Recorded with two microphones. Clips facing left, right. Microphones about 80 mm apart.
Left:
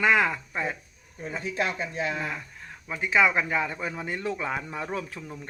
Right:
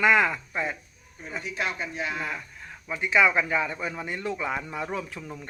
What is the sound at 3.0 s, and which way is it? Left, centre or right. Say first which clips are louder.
Speech: right 1 dB; left.